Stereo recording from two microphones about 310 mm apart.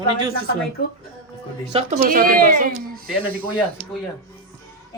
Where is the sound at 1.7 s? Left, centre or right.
Right.